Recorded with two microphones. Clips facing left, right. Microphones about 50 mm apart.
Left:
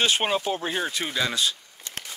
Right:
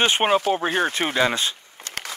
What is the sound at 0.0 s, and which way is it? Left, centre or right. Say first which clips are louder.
Speech: right 5 dB; right.